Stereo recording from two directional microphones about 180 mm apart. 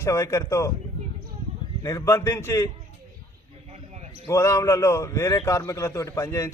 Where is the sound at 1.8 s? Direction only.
15° left (ahead or behind).